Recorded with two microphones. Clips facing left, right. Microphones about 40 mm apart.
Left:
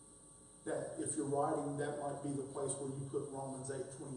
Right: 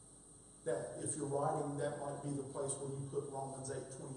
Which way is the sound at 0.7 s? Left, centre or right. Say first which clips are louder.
Even; centre.